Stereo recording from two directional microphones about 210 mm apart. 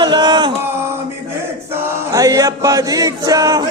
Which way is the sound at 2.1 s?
15° right (ahead or behind).